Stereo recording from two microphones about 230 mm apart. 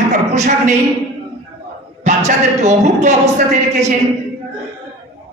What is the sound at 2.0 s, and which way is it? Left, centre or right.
A man's voice, right.